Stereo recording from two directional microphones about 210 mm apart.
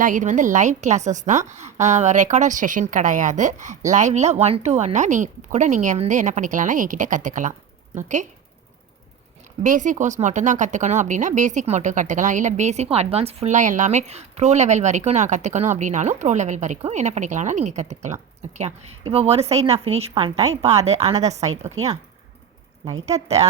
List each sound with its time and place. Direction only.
0.0 s speech: 40° right (ahead or behind)
9.6 s speech: 35° right (ahead or behind)
23.0 s speech: 30° right (ahead or behind)